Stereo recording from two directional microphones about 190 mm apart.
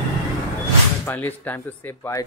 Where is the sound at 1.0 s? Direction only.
10° left (ahead or behind).